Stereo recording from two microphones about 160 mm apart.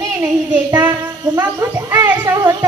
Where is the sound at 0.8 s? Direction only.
15° right (ahead or behind).